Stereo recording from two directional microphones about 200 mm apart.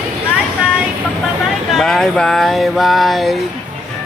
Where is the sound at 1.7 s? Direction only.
Centre (ahead or behind).